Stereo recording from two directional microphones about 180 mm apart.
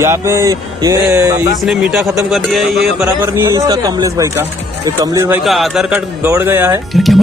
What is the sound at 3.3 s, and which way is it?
Speech, 15° right (ahead or behind).